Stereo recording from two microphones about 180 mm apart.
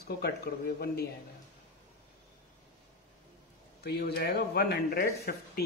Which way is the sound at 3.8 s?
65° left (ahead or behind).